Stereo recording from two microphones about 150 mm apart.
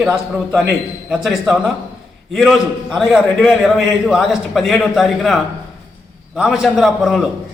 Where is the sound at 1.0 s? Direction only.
5° right (ahead or behind).